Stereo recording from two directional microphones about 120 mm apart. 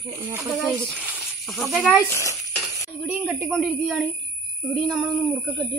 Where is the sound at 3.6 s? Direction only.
Centre (ahead or behind).